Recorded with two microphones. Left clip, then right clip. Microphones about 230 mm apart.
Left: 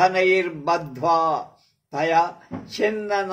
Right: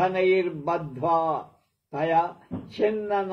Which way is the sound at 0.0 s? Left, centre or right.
Left.